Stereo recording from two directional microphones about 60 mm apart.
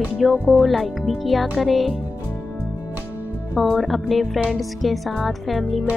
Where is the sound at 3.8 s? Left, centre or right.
Centre.